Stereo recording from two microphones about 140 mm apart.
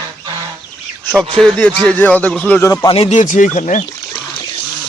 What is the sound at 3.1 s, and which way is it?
Speech, 65° left (ahead or behind).